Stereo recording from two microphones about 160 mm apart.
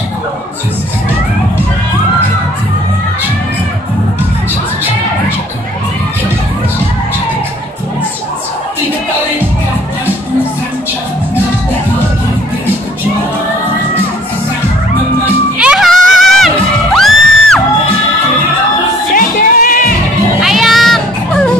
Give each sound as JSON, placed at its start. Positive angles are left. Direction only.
{"t": 15.6, "sound": "music", "side_deg": -5}
{"t": 19.1, "sound": "music", "side_deg": 60}
{"t": 20.3, "sound": "music", "side_deg": 0}